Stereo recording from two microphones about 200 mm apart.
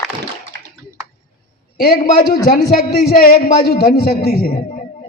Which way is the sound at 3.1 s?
45° left (ahead or behind).